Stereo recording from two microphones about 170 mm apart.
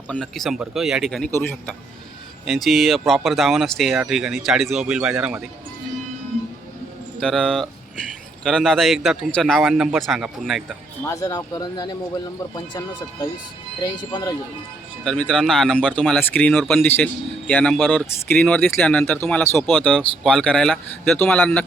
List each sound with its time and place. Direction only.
0.1 s a man's voice: 5° left (ahead or behind)
1.3 s speech: 15° left (ahead or behind)
2.4 s a man's voice: centre (ahead or behind)
7.2 s a man's voice: centre (ahead or behind)
11.0 s speech: 20° left (ahead or behind)
13.8 s speech: 25° left (ahead or behind)
15.0 s a man's voice: 5° left (ahead or behind)
19.5 s a man's voice: centre (ahead or behind)